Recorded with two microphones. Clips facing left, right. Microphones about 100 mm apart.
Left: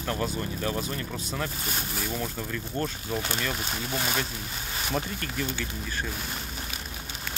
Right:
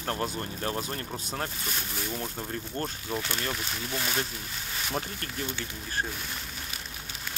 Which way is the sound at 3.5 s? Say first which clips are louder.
Left 3 dB; 30° left (ahead or behind).